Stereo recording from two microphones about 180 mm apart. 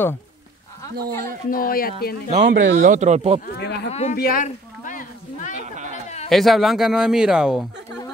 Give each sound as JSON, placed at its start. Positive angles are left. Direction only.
{"t": 0.9, "sound": "speech", "side_deg": -55}
{"t": 1.5, "sound": "speech", "side_deg": 55}
{"t": 2.4, "sound": "speech", "side_deg": -50}
{"t": 3.5, "sound": "speech", "side_deg": 65}
{"t": 3.9, "sound": "speech", "side_deg": 40}
{"t": 4.2, "sound": "a sound", "side_deg": 50}
{"t": 6.2, "sound": "speech", "side_deg": 0}